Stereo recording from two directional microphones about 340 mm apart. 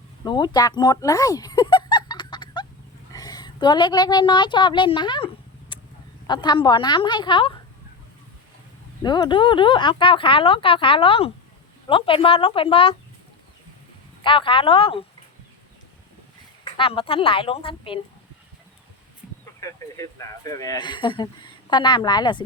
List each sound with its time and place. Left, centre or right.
0.3 s a woman's voice: centre
9.0 s speech: centre
14.3 s speech: centre
16.7 s speech: centre
19.5 s speech: centre